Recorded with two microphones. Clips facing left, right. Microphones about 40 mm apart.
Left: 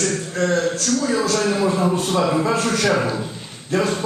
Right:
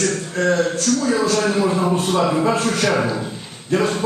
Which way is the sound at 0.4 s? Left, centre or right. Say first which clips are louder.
Right 2 dB; right.